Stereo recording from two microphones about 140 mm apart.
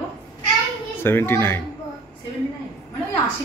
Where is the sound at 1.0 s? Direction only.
15° left (ahead or behind).